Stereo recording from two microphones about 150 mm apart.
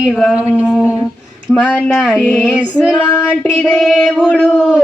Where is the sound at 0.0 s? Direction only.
Centre (ahead or behind).